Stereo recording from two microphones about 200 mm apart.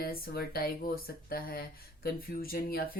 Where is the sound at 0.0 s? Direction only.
50° left (ahead or behind).